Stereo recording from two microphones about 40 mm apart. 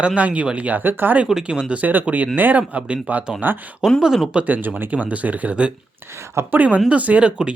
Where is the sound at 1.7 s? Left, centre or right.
Right.